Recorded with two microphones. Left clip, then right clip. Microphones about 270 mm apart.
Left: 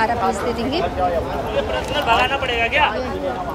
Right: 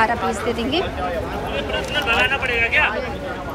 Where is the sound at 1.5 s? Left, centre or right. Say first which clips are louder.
Left 1 dB; left.